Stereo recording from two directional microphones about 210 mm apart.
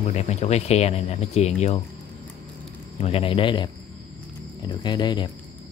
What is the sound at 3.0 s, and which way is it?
A man's voice, 25° left (ahead or behind).